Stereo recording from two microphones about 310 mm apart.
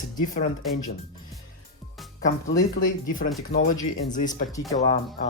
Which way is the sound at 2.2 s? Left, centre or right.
Left.